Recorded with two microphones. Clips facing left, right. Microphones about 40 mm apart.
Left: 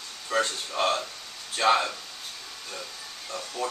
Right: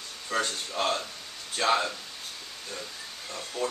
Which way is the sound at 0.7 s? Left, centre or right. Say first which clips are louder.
Left 3 dB; centre.